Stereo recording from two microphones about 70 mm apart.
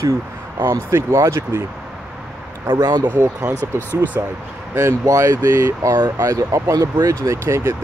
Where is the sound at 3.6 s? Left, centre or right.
Right.